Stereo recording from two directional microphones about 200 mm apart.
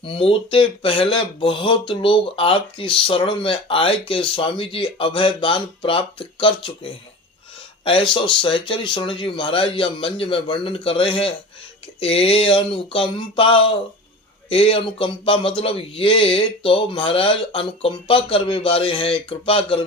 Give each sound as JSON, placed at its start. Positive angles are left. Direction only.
{"t": 0.0, "sound": "speech", "side_deg": 25}